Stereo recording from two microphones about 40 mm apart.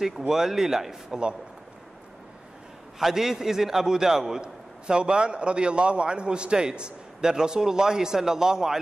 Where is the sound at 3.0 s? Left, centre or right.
Centre.